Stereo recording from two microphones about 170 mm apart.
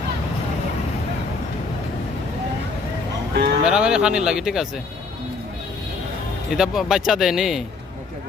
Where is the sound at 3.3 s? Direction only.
75° right (ahead or behind).